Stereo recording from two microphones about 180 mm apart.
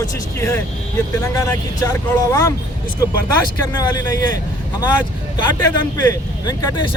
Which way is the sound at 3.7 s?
20° left (ahead or behind).